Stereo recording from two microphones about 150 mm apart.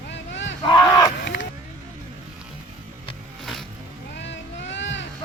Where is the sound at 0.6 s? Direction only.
30° left (ahead or behind).